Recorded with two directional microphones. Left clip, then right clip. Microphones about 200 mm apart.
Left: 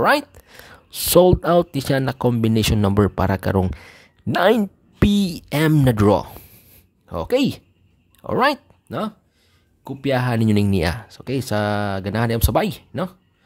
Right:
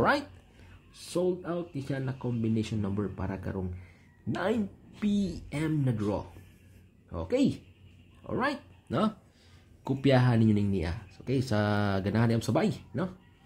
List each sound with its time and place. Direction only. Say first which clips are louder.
0.9 s speech: left 17 dB; 60° left (ahead or behind)
4.3 s speech: left 14 dB; 40° left (ahead or behind)
7.1 s speech: left 9 dB; 40° left (ahead or behind)
8.8 s speech: left 3 dB; 25° left (ahead or behind); by 13.1 s 40° left (ahead or behind)